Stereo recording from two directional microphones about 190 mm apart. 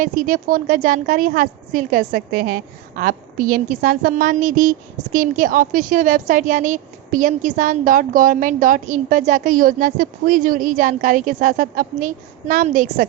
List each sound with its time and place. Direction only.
0.0 s a woman's voice: 45° right (ahead or behind)